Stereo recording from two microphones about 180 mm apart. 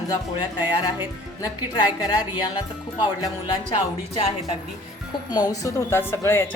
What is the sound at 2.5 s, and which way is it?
A woman's voice, 25° left (ahead or behind).